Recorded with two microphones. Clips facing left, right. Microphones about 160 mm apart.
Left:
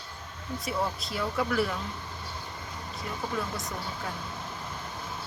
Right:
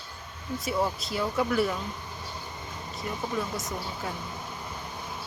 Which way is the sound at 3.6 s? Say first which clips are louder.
Right 1 dB; 20° right (ahead or behind).